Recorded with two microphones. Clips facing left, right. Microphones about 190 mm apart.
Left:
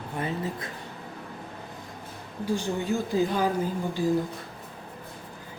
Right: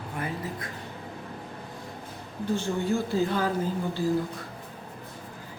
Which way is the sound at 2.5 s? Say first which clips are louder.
Even; 15° left (ahead or behind).